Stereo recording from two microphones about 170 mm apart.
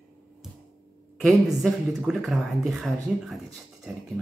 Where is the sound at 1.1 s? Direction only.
Centre (ahead or behind).